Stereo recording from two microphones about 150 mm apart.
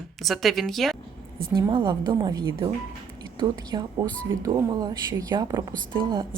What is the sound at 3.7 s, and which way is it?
Speech, 30° right (ahead or behind).